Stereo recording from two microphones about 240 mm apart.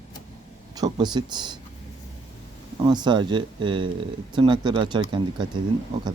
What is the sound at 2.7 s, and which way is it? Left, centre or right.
Speech, centre.